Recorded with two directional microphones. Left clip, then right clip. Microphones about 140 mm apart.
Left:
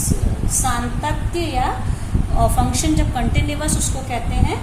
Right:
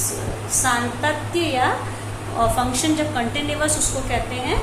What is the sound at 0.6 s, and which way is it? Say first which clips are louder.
Speech: right 2 dB; 35° left (ahead or behind).